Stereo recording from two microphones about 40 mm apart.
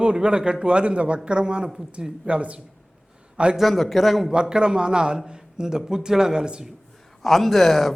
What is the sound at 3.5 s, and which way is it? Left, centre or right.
Speech, centre.